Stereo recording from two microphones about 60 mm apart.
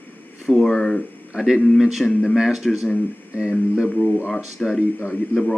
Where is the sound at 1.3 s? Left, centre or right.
Centre.